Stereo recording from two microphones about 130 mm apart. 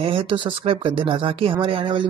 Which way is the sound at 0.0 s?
40° right (ahead or behind).